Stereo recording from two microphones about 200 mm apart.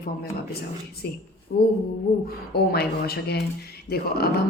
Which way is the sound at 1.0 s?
50° left (ahead or behind).